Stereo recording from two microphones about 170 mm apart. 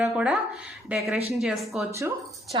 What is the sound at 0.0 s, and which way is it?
A woman's voice, 5° right (ahead or behind).